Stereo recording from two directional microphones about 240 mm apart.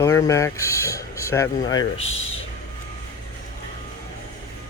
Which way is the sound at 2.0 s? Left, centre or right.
Left.